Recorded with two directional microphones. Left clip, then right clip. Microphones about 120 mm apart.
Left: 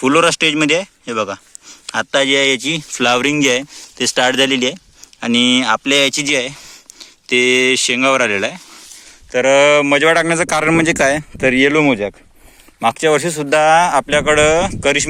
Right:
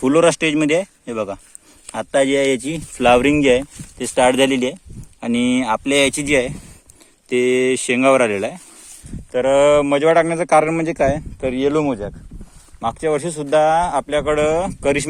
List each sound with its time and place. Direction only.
0.0 s speech: 5° right (ahead or behind)
9.3 s speech: 10° left (ahead or behind)
9.9 s speech: 20° left (ahead or behind)
11.3 s speech: 40° left (ahead or behind)
12.8 s speech: 35° left (ahead or behind)
13.1 s speech: 25° left (ahead or behind); by 15.0 s centre (ahead or behind)